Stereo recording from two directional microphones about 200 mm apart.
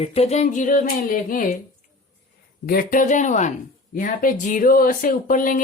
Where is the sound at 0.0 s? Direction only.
30° left (ahead or behind).